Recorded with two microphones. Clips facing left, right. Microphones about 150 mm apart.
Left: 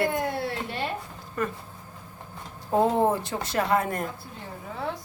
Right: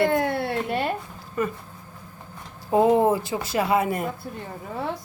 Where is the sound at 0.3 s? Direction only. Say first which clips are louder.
Right 5 dB; 60° right (ahead or behind).